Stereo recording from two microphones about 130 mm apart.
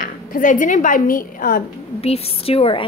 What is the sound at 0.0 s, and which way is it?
A woman's voice, 90° left.